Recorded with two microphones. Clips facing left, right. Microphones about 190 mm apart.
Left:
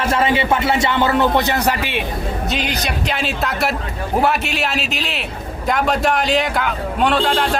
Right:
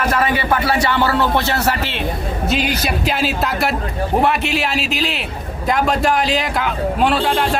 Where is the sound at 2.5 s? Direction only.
5° right (ahead or behind).